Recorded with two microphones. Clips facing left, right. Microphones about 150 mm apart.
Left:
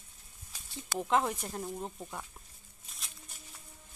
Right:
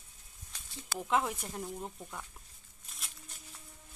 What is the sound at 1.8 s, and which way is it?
Speech, 15° left (ahead or behind).